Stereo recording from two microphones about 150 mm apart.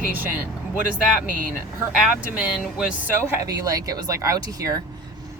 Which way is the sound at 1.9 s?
5° right (ahead or behind).